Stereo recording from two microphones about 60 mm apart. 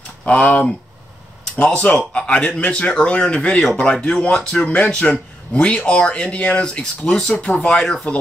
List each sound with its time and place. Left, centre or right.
1.6 s speech: left
3.3 s speech: centre
3.7 s speech: centre